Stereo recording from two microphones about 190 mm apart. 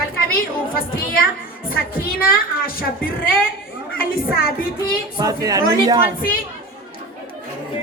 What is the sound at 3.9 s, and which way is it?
A woman's voice, 50° left (ahead or behind).